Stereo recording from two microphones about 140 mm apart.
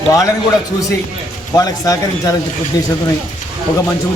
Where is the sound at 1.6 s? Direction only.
25° left (ahead or behind).